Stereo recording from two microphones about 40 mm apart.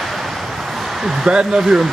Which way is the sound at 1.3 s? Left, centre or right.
Right.